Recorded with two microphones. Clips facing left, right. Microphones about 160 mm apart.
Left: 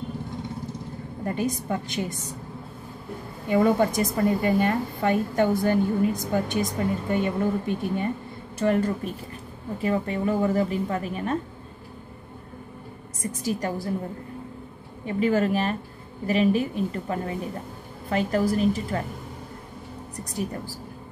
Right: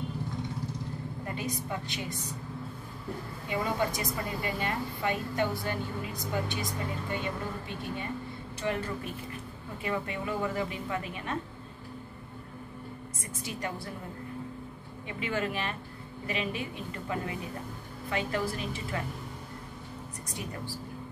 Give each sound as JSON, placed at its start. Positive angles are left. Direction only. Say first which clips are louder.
{"t": 1.2, "sound": "a woman's voice", "louder": "left 10 dB", "side_deg": 45}
{"t": 3.4, "sound": "a woman's voice", "louder": "left 10 dB", "side_deg": 50}
{"t": 13.4, "sound": "a woman's voice", "louder": "left 8 dB", "side_deg": 40}
{"t": 15.0, "sound": "a woman's voice", "louder": "left 10 dB", "side_deg": 40}